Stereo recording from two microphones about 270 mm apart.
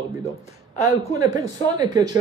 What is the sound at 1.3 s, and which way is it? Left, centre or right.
Speech, centre.